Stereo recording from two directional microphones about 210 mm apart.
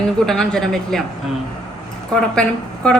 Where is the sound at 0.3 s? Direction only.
5° left (ahead or behind).